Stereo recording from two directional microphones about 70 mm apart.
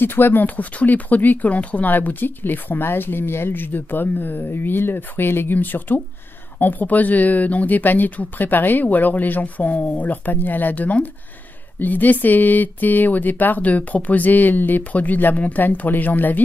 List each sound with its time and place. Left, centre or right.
0.0 s speech: left